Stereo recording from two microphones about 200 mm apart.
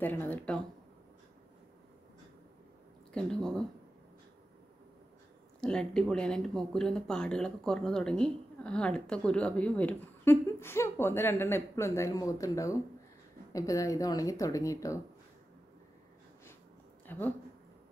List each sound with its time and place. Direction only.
0.0 s speech: 10° left (ahead or behind)
3.1 s speech: 5° left (ahead or behind)
5.6 s speech: 5° left (ahead or behind)
17.0 s a sound: 10° left (ahead or behind)